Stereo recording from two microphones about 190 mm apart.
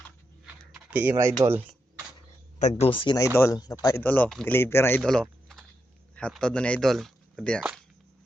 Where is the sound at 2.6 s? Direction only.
35° left (ahead or behind); by 5.0 s 10° left (ahead or behind).